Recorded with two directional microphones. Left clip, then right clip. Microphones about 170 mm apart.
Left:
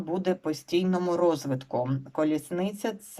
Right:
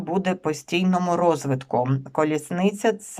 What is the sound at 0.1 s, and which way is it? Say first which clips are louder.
Speech: right 4 dB; 15° right (ahead or behind).